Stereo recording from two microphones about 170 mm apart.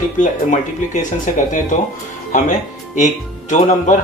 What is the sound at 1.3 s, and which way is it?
Speech, 50° left (ahead or behind).